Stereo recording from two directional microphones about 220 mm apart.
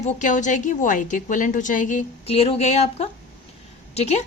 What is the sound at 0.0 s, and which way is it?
A woman's voice, 35° left (ahead or behind).